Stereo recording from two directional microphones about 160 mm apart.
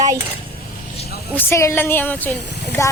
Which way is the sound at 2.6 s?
15° left (ahead or behind).